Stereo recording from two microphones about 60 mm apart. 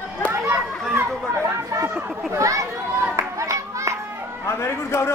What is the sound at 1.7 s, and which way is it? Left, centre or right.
Chatter, right.